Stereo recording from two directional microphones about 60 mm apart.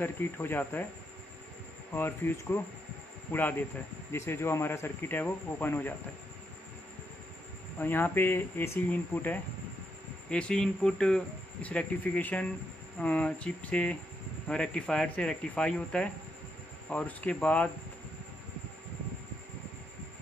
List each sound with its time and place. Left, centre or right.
0.0 s speech: left
2.0 s speech: left
3.3 s speech: left
4.1 s speech: left
7.8 s speech: left
10.3 s speech: centre
11.6 s speech: left